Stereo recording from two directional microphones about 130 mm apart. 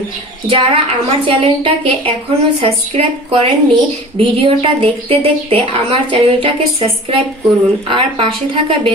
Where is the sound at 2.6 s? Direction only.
50° right (ahead or behind).